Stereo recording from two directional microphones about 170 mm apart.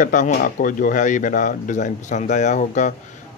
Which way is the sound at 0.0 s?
50° left (ahead or behind).